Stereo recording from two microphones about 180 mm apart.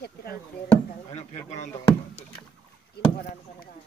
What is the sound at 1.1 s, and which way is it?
Speech, 40° left (ahead or behind).